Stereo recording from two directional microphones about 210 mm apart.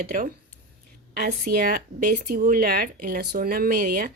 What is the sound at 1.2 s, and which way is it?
Speech, 45° right (ahead or behind).